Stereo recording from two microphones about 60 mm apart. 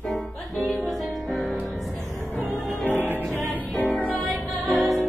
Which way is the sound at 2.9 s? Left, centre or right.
Right.